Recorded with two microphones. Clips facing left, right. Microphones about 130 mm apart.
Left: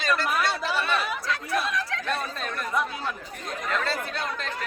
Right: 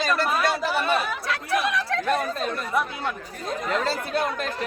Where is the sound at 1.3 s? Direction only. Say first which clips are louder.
Right 4 dB; 75° right (ahead or behind).